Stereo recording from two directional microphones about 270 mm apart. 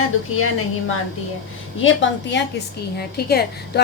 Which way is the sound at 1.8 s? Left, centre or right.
Left.